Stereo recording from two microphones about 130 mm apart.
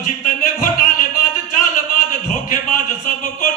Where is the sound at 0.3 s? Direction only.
90° left.